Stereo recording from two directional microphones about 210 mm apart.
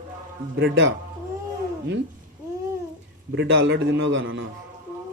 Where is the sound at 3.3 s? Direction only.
60° right (ahead or behind).